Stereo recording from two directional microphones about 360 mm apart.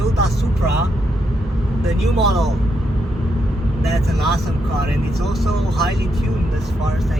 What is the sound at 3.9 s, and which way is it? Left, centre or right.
Speech, centre.